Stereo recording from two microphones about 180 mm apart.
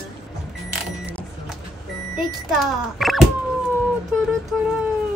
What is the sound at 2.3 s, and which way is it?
Speech, centre (ahead or behind).